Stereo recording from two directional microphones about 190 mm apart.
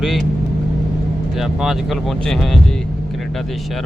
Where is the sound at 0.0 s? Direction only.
Centre (ahead or behind).